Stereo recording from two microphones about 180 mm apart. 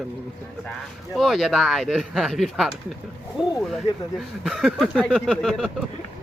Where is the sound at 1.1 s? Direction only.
Centre (ahead or behind).